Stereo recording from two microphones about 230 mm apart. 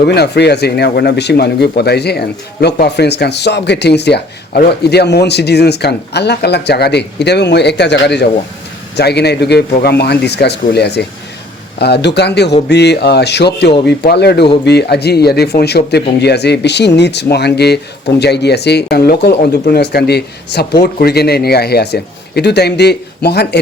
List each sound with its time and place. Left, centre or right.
0.0 s speech: left